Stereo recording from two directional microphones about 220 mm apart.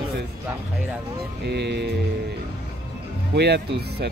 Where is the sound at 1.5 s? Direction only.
50° right (ahead or behind).